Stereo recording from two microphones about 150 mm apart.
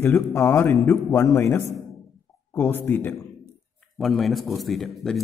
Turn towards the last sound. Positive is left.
turn(degrees=0)  # may be behind; listen again after turning